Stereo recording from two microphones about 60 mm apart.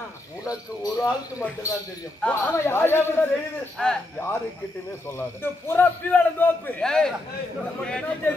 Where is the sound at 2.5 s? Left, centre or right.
Left.